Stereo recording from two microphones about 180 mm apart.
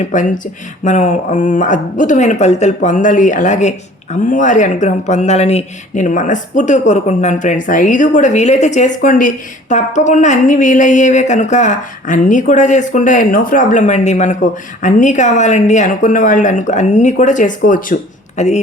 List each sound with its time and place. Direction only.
0.0 s speech: 45° left (ahead or behind)
18.3 s speech: 40° left (ahead or behind)